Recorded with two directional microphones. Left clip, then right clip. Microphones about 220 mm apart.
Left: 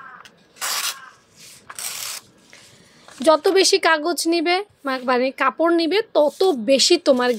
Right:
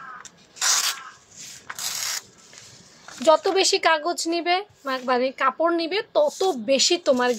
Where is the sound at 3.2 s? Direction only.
30° left (ahead or behind).